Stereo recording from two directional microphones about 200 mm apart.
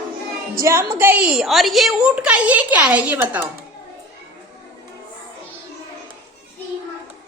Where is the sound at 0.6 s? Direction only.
15° right (ahead or behind).